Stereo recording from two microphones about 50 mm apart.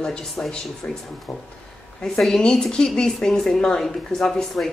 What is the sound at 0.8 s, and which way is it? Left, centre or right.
Speech, left.